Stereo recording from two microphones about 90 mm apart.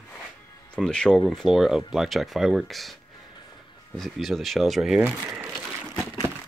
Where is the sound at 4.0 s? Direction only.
Centre (ahead or behind).